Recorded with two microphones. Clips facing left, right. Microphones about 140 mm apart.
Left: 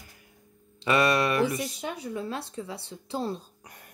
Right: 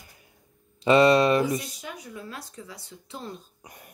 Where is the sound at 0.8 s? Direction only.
25° right (ahead or behind).